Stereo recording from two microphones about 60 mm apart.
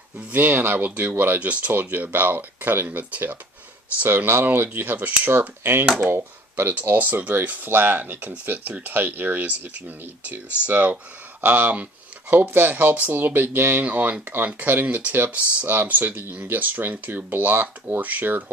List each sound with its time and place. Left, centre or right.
0.3 s speech: right
1.4 s speech: right